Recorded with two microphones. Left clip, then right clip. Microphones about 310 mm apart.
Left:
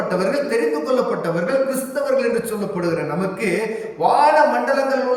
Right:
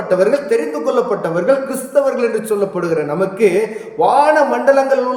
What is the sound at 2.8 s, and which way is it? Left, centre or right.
A man's voice, centre.